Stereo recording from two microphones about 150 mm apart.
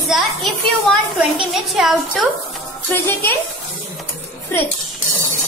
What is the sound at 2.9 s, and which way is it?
Speech, 15° left (ahead or behind).